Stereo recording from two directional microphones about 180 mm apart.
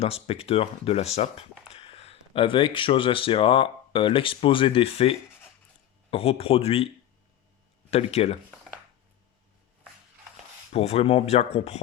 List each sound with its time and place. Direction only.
0.0 s speech: 35° left (ahead or behind)
7.9 s speech: 35° left (ahead or behind)
10.7 s speech: 35° left (ahead or behind)